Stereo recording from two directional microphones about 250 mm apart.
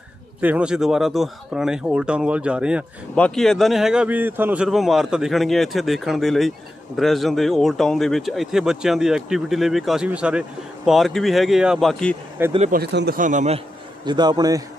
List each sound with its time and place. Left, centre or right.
0.4 s speech: centre
12.5 s speech: right
12.8 s a man's voice: right
14.0 s a man's voice: centre